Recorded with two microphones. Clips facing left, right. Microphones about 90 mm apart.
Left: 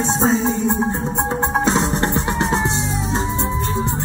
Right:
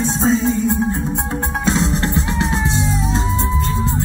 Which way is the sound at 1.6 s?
30° left (ahead or behind).